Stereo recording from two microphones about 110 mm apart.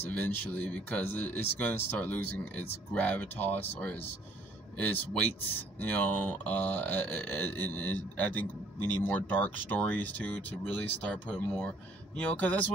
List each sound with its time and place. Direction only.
0.0 s speech: 15° left (ahead or behind)